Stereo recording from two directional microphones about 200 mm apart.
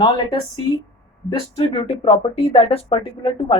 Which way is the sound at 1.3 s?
30° left (ahead or behind).